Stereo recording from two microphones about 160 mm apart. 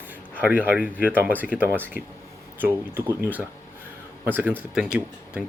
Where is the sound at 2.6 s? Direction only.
15° right (ahead or behind).